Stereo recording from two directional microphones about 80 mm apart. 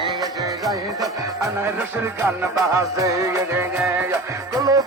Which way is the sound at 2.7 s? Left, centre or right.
Right.